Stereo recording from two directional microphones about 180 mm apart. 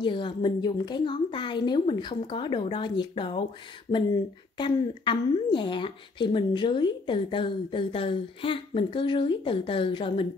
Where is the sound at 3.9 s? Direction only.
40° left (ahead or behind).